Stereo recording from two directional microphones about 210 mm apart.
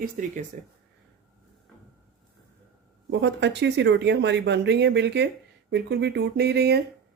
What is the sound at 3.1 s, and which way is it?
Speech, 60° right (ahead or behind).